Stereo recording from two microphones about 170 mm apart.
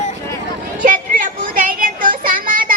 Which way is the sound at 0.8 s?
50° right (ahead or behind).